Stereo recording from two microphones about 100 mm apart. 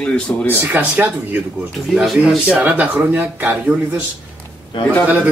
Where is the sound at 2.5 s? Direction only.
15° right (ahead or behind).